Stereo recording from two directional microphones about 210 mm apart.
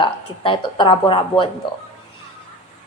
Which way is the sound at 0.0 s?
25° left (ahead or behind).